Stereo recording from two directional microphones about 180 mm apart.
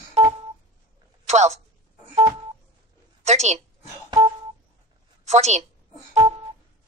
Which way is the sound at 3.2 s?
40° right (ahead or behind).